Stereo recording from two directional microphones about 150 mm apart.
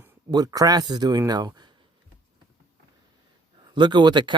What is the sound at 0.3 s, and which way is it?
Speech, 25° right (ahead or behind).